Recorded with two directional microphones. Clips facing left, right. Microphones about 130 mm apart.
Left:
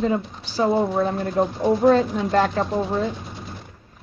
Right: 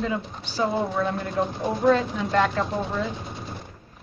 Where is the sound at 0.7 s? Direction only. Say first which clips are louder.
Left 9 dB; centre (ahead or behind).